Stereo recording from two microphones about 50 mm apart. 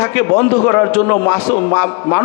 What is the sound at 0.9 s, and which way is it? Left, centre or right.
A man's voice, left.